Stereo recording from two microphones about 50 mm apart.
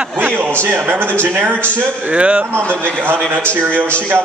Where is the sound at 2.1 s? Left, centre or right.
Right.